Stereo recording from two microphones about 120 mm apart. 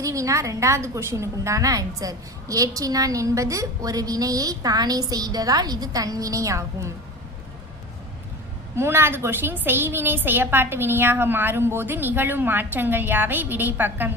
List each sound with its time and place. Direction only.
0.0 s a woman's voice: 25° right (ahead or behind)
8.7 s a woman's voice: 20° right (ahead or behind)